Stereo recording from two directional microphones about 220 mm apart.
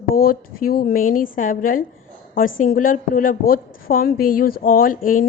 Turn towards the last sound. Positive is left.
turn(degrees=40)  # may be behind; listen again after turning